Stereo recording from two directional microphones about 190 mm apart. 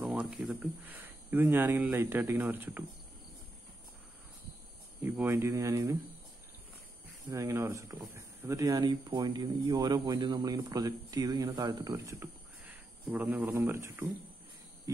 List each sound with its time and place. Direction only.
0.0 s speech: 5° right (ahead or behind)
5.0 s speech: 10° right (ahead or behind)
7.2 s speech: 15° right (ahead or behind)